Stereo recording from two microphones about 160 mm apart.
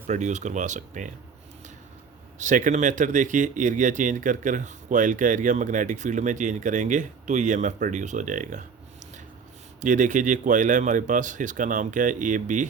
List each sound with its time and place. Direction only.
0.1 s speech: 50° right (ahead or behind)
2.4 s speech: 50° right (ahead or behind)
9.8 s speech: 50° right (ahead or behind)